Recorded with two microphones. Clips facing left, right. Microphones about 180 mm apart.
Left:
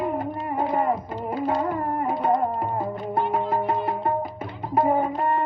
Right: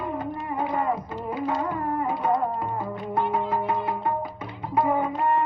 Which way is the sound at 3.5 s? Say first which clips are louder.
Left 2 dB; 50° left (ahead or behind).